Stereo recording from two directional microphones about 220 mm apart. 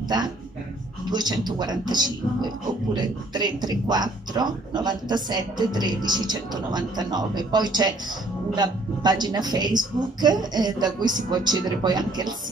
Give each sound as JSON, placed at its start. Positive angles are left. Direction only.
{"t": 1.0, "sound": "a man's voice", "side_deg": -20}